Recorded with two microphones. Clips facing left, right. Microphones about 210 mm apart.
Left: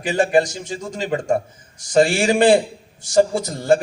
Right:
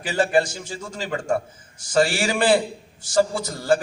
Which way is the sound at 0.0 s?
20° left (ahead or behind).